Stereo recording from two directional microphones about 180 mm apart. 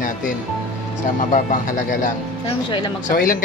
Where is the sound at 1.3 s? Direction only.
50° left (ahead or behind).